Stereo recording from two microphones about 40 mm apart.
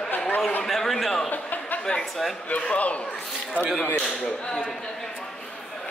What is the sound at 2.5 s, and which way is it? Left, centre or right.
Speech, left.